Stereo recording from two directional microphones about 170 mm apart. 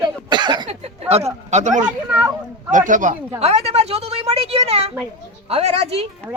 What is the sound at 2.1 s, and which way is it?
Speech, 10° right (ahead or behind).